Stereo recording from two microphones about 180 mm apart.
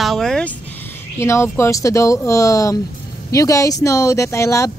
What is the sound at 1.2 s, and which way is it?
Speech, 15° left (ahead or behind).